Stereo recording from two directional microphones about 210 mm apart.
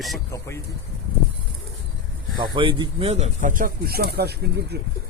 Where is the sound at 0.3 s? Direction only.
15° left (ahead or behind).